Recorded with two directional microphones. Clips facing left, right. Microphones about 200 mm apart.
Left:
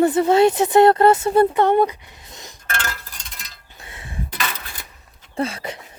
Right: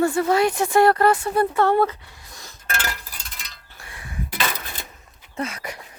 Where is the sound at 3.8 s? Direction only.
25° left (ahead or behind).